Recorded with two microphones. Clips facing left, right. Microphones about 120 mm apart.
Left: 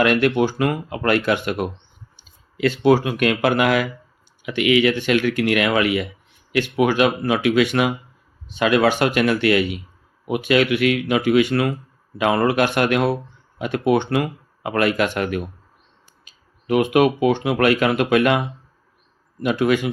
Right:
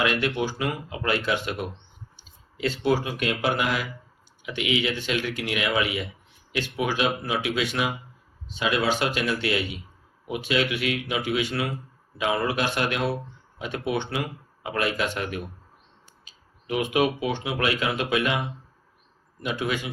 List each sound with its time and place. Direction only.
0.0 s speech: 60° left (ahead or behind)
2.6 s speech: 70° left (ahead or behind)